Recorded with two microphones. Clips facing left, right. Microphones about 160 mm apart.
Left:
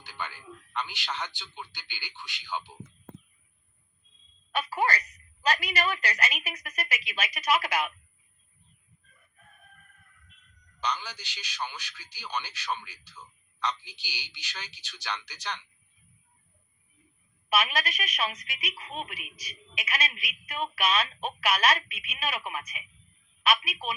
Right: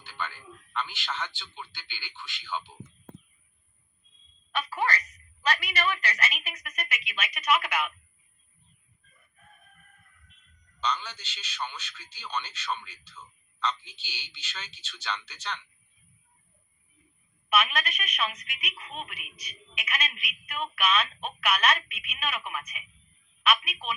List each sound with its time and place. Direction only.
0.0 s speech: 15° left (ahead or behind)
4.5 s a woman's voice: 40° left (ahead or behind)
10.8 s a man's voice: 10° left (ahead or behind)
17.5 s a woman's voice: 35° left (ahead or behind)